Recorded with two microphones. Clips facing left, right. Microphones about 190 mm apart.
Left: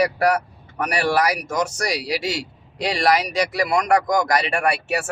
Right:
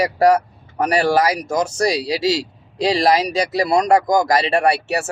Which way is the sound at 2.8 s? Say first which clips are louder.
Right 4 dB; 30° right (ahead or behind).